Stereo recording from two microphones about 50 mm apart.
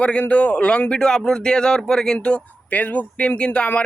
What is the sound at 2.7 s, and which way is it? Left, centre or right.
Speech, left.